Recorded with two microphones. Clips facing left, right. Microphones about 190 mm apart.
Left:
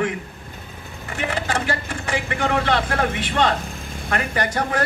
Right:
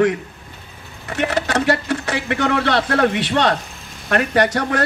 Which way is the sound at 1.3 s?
75° right (ahead or behind).